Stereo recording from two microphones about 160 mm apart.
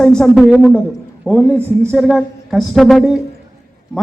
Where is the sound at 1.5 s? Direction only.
15° right (ahead or behind).